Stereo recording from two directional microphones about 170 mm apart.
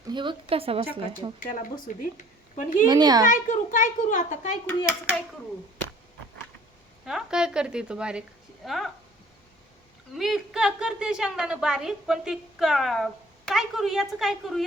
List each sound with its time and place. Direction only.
0.1 s a woman's voice: 30° right (ahead or behind)
1.5 s a child's voice: 50° left (ahead or behind)
2.8 s a child's voice: 25° right (ahead or behind)
3.2 s a child's voice: 45° left (ahead or behind)
7.0 s a woman's voice: centre (ahead or behind)
10.2 s a woman's voice: centre (ahead or behind)